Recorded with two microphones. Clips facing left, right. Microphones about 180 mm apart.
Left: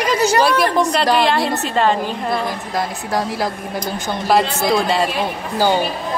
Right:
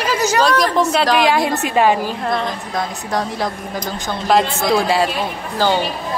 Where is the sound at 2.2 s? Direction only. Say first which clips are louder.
Even; 5° left (ahead or behind).